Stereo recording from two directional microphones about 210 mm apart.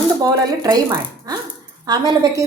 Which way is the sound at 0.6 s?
15° right (ahead or behind).